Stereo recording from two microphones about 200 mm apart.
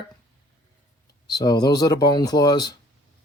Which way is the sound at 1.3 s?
20° left (ahead or behind).